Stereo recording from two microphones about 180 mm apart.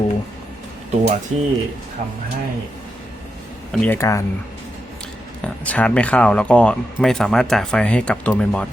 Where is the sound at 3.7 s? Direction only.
5° left (ahead or behind).